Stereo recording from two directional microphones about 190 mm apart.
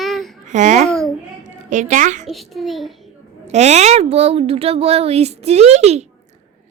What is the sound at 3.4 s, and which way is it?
A woman's voice, 35° right (ahead or behind).